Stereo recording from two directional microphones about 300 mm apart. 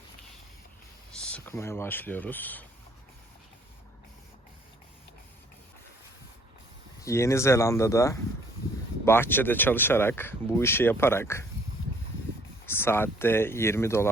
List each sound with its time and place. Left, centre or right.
1.1 s speech: centre
7.0 s speech: centre
12.6 s speech: centre